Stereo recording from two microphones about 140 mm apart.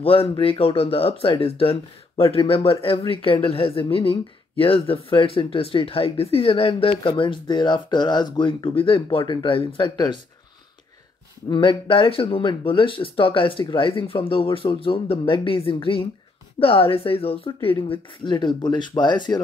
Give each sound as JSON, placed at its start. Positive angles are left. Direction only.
{"t": 0.0, "sound": "a woman's voice", "side_deg": 45}
{"t": 11.4, "sound": "a woman's voice", "side_deg": 35}